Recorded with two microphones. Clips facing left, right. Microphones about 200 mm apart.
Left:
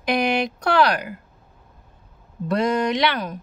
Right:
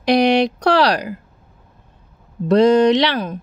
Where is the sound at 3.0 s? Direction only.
25° right (ahead or behind).